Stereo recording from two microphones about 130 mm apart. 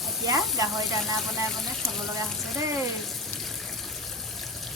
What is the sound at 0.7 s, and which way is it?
Speech, centre (ahead or behind).